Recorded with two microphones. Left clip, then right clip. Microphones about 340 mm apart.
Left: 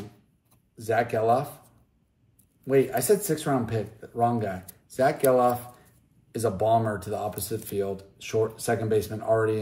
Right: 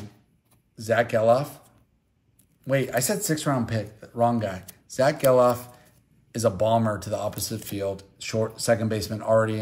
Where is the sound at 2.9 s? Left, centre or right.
Right.